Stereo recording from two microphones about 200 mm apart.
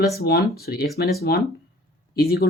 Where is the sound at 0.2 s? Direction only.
50° left (ahead or behind).